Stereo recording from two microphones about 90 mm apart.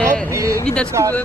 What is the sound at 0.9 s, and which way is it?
Speech, 35° right (ahead or behind).